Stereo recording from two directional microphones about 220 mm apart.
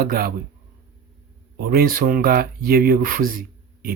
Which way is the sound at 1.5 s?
45° right (ahead or behind).